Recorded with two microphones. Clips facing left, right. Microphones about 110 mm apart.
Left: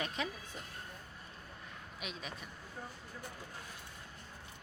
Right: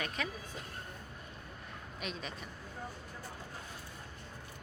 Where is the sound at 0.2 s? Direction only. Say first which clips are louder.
Even; 25° left (ahead or behind).